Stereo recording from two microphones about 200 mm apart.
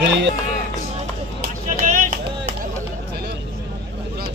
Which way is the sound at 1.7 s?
40° right (ahead or behind).